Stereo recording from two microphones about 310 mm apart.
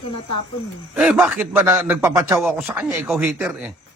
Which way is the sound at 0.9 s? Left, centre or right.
Centre.